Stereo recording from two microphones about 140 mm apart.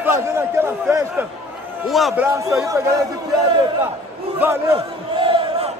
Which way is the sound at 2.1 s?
15° right (ahead or behind).